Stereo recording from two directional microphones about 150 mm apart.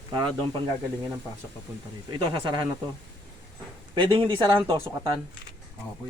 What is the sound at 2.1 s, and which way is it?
Speech, 30° right (ahead or behind).